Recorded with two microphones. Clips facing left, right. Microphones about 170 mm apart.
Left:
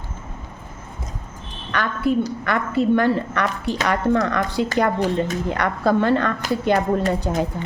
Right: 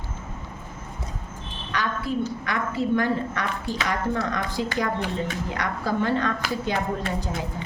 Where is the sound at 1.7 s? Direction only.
60° left (ahead or behind).